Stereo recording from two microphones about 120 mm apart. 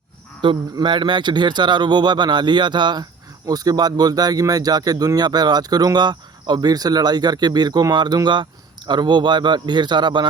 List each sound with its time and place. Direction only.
0.4 s speech: 45° right (ahead or behind)